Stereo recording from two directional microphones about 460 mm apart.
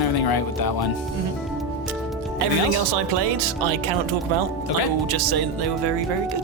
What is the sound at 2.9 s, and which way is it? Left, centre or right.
Speech, right.